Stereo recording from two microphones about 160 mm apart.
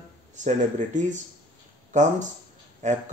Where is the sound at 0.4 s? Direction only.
50° right (ahead or behind).